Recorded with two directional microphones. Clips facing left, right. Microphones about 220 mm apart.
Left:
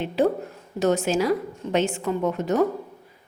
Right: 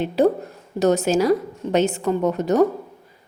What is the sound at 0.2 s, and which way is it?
A woman's voice, 40° right (ahead or behind).